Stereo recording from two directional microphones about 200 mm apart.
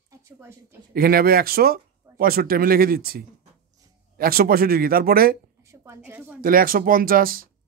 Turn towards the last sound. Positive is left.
turn(degrees=-45)  # may be behind; listen again after turning